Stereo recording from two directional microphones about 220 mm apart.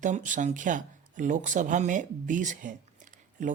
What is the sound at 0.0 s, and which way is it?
Speech, 35° right (ahead or behind).